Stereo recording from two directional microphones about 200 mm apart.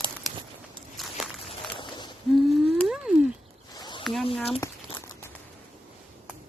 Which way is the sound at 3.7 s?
20° left (ahead or behind).